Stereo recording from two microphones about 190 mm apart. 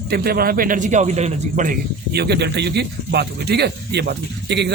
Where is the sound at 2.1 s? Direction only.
60° right (ahead or behind).